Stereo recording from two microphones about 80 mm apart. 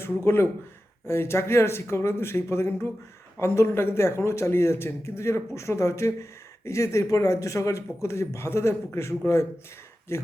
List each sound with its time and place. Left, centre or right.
1.0 s speech: left